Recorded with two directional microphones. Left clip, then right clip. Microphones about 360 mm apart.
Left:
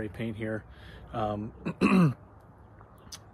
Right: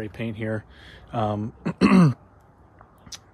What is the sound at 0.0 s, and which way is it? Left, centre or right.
Speech, right.